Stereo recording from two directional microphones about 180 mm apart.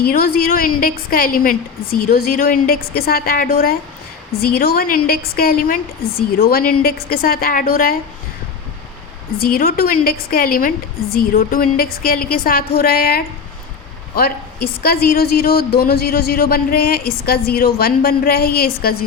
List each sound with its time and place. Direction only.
0.0 s a woman's voice: 55° left (ahead or behind)
9.4 s a woman's voice: 55° left (ahead or behind)